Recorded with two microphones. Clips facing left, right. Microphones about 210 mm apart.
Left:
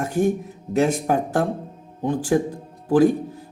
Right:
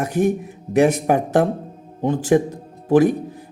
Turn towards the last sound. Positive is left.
turn(degrees=-20)  # may be behind; listen again after turning